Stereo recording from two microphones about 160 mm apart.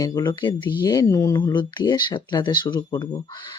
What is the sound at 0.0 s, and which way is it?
Speech, 25° left (ahead or behind).